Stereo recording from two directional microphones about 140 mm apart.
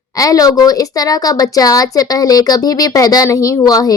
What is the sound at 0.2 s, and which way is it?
A child's voice, 25° left (ahead or behind).